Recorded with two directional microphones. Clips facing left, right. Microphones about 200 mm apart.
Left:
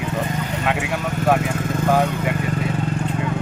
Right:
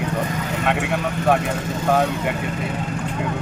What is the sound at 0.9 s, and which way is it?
Speech, centre (ahead or behind).